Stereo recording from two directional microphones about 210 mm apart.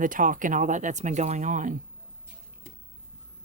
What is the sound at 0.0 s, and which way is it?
Speech, 40° right (ahead or behind).